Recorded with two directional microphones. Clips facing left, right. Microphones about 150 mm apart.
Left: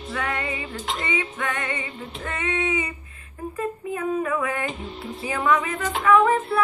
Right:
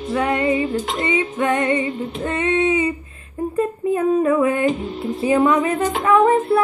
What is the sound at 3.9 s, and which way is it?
Female singing, 30° right (ahead or behind).